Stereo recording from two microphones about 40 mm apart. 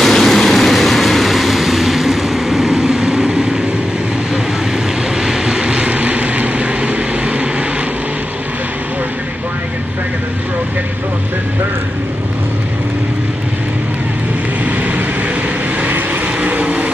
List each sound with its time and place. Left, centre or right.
0.0 s vehicle: centre
5.2 s vehicle: centre
16.3 s vehicle: right